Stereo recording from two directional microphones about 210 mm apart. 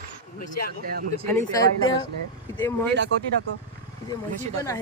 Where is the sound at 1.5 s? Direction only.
20° left (ahead or behind).